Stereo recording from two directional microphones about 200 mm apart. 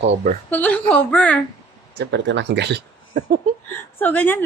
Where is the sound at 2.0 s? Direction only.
60° right (ahead or behind).